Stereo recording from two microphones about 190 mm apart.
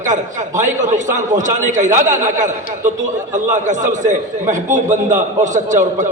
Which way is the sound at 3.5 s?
40° right (ahead or behind).